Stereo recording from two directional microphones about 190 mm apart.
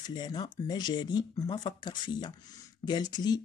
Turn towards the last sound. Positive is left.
turn(degrees=20)  # may be behind; listen again after turning